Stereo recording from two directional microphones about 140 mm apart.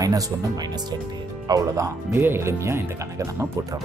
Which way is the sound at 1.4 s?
25° right (ahead or behind).